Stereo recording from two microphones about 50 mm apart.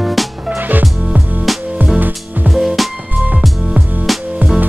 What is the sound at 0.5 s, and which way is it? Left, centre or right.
Music, right.